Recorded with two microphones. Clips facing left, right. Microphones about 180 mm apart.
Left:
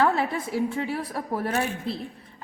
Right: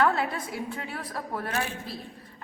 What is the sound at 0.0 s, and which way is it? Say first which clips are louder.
A woman's voice: left 2 dB; 25° left (ahead or behind).